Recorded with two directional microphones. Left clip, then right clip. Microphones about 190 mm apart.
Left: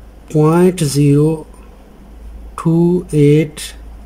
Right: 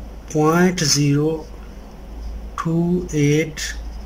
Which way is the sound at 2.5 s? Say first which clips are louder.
Left 7 dB; 25° left (ahead or behind).